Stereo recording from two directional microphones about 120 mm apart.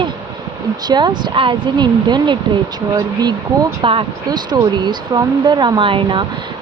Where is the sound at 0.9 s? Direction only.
35° right (ahead or behind).